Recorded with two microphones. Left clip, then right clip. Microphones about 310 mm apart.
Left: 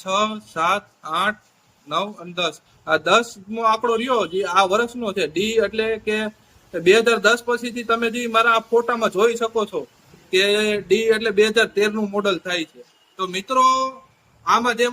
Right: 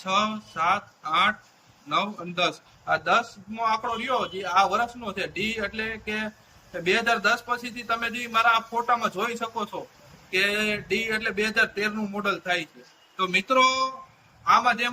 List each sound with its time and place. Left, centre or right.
0.0 s a man's voice: left